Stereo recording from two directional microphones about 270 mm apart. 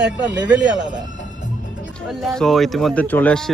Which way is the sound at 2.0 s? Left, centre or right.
Centre.